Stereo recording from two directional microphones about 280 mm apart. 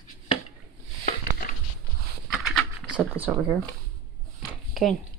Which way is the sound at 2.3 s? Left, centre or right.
Centre.